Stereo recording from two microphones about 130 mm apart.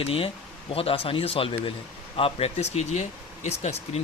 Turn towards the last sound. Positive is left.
turn(degrees=55)  # may be behind; listen again after turning